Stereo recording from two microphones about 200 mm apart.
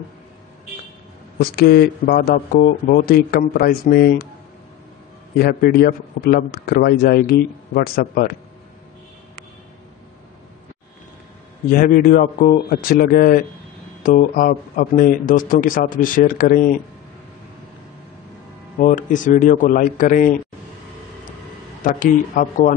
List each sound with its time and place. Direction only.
1.4 s a man's voice: 50° left (ahead or behind)
5.4 s a man's voice: 50° left (ahead or behind)
11.7 s a man's voice: 45° left (ahead or behind)
18.8 s a man's voice: 40° left (ahead or behind)
21.8 s a man's voice: 40° left (ahead or behind)